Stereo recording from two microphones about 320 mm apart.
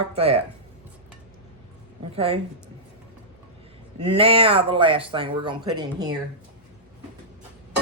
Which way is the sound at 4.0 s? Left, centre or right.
Centre.